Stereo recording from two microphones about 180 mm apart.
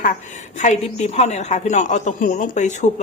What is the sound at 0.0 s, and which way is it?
A woman's voice, 45° left (ahead or behind).